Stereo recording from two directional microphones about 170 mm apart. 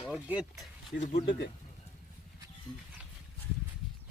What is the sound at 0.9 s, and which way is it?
Speech, 55° left (ahead or behind).